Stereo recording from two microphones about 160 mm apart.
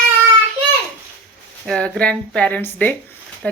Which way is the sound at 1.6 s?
5° left (ahead or behind).